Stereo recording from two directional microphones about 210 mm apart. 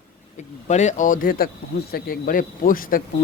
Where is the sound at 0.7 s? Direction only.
35° left (ahead or behind).